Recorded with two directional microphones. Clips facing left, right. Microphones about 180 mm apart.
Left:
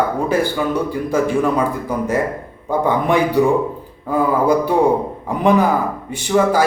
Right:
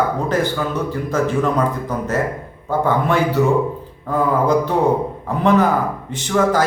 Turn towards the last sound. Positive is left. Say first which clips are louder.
# left 2 dB
turn(degrees=10)  # may be behind; listen again after turning